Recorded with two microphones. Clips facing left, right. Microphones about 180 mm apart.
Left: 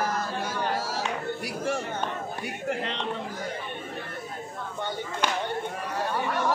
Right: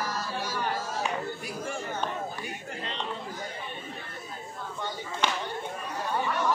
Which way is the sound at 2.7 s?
75° left (ahead or behind).